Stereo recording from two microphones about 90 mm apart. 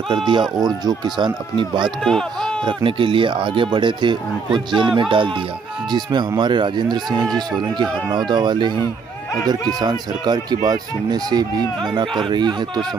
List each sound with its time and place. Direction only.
0.1 s speech: 60° right (ahead or behind)
2.0 s speech: 5° left (ahead or behind)
2.6 s speech: 70° right (ahead or behind)
5.9 s speech: 55° right (ahead or behind)
9.5 s speech: 50° right (ahead or behind)